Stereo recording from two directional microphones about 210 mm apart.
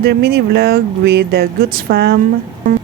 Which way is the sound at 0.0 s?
50° right (ahead or behind).